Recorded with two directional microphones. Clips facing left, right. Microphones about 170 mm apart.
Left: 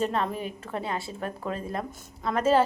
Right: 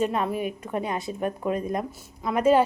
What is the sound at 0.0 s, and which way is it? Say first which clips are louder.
A woman's voice: right 3 dB; 10° right (ahead or behind).